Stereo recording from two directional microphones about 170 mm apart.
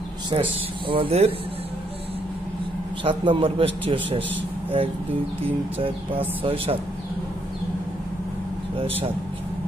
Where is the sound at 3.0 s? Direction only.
30° right (ahead or behind).